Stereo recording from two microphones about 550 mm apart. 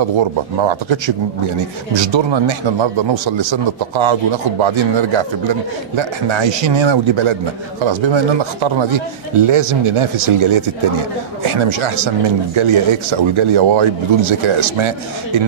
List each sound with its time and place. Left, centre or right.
0.6 s a man's voice: right
9.3 s speech: right